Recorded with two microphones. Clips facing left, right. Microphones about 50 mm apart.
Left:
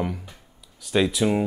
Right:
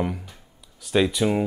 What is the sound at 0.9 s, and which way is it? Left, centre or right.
Speech, centre.